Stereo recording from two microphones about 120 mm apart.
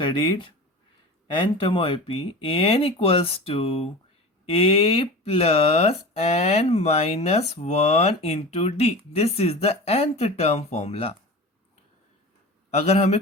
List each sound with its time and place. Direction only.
0.0 s speech: 40° left (ahead or behind); by 11.1 s 60° left (ahead or behind)
12.7 s speech: 65° left (ahead or behind)